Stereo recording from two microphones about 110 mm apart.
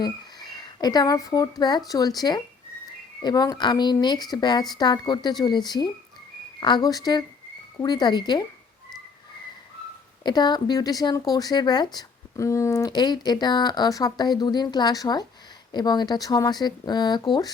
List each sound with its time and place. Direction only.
0.0 s speech: 40° left (ahead or behind)
10.2 s speech: 40° left (ahead or behind)
11.9 s speech: 30° left (ahead or behind)